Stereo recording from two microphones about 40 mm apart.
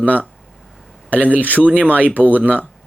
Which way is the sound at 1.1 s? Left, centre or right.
Right.